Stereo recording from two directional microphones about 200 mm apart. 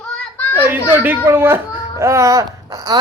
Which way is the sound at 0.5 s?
10° right (ahead or behind).